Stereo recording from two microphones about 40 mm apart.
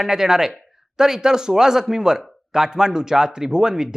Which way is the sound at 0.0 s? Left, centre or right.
Centre.